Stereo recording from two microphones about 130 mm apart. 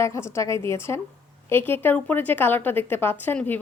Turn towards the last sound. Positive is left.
turn(degrees=15)  # may be behind; listen again after turning